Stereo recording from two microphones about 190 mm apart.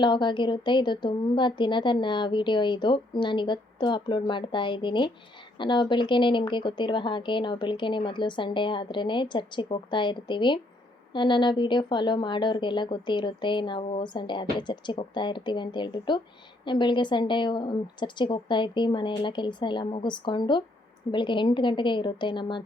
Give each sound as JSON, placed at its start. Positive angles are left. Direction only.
{"t": 0.0, "sound": "a woman's voice", "side_deg": 25}